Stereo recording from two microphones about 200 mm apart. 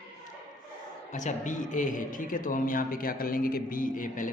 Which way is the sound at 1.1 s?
40° left (ahead or behind).